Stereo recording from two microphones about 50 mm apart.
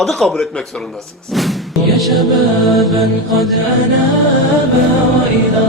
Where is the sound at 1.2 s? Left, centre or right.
Centre.